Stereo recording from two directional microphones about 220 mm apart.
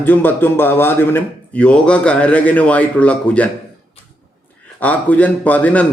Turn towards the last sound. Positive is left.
turn(degrees=5)  # may be behind; listen again after turning